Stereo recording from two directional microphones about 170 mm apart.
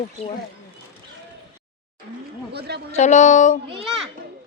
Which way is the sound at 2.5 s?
75° right (ahead or behind).